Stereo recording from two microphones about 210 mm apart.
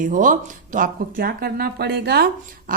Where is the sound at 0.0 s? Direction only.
40° right (ahead or behind).